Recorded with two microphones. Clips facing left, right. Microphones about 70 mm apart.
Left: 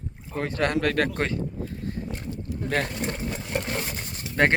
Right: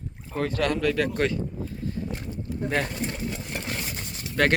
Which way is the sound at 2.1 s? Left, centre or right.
Right.